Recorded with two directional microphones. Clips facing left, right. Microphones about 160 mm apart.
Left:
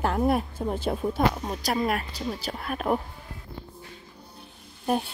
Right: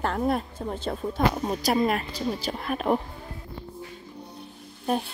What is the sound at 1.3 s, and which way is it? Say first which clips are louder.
Speech: right 4 dB; 5° right (ahead or behind).